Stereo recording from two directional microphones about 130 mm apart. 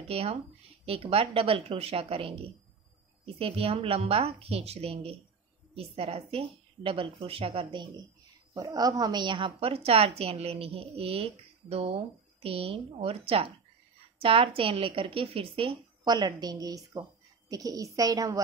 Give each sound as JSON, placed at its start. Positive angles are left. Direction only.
{"t": 0.1, "sound": "a woman's voice", "side_deg": -50}